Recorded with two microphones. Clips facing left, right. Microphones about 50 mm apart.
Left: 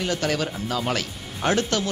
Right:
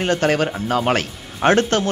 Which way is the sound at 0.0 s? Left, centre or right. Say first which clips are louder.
Right 7 dB; right.